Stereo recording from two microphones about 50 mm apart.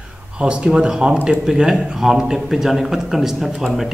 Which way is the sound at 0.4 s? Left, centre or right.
Centre.